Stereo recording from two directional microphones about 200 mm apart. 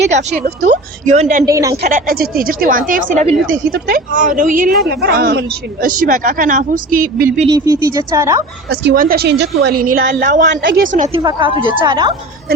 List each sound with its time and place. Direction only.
0.6 s a woman's voice: 35° right (ahead or behind)
1.5 s speech: 15° right (ahead or behind)
1.8 s speech: 45° right (ahead or behind)
7.5 s speech: 15° right (ahead or behind)
8.7 s speech: 55° right (ahead or behind)
9.6 s a woman's voice: 90° right
10.2 s a woman's voice: 40° right (ahead or behind)
10.5 s a woman's voice: 65° right (ahead or behind)
10.9 s a woman's voice: 40° right (ahead or behind)
11.2 s a woman's voice: 25° right (ahead or behind)